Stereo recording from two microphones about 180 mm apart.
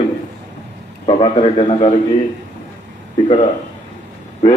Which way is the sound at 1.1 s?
30° left (ahead or behind).